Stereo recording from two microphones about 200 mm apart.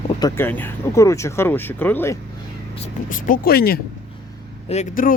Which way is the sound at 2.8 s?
40° left (ahead or behind).